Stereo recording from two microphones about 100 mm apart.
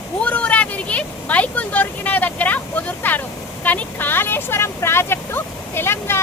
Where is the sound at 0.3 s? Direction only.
15° left (ahead or behind).